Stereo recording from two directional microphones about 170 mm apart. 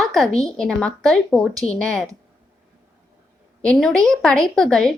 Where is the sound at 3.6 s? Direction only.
5° left (ahead or behind).